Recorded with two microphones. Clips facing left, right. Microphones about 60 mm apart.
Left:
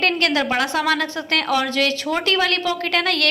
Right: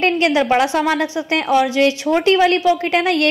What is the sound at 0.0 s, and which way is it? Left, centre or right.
A woman's voice, centre.